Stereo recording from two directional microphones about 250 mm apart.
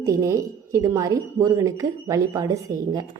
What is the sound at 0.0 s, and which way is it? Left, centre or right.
A woman's voice, centre.